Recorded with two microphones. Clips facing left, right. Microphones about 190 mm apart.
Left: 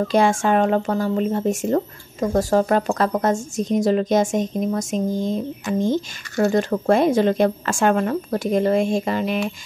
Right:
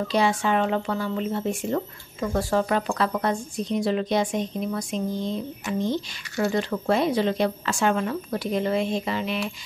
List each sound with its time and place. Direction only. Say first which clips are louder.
0.1 s speech: left 4 dB; 50° left (ahead or behind)